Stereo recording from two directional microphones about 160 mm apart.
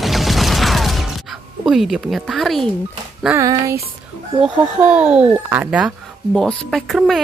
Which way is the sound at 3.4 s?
20° right (ahead or behind).